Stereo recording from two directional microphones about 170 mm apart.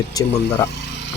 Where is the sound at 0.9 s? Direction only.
90° left.